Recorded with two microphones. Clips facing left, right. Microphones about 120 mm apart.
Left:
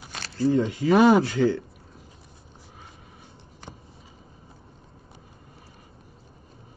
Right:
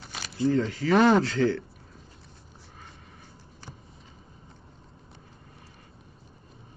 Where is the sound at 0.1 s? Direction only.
5° right (ahead or behind).